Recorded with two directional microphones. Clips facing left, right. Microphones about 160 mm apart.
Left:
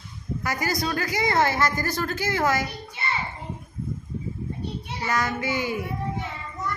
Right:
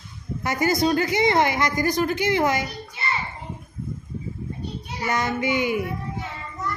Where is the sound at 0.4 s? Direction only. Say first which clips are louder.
Right 6 dB; 25° right (ahead or behind).